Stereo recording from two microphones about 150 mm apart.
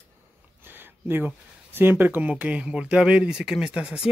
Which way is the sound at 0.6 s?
15° right (ahead or behind).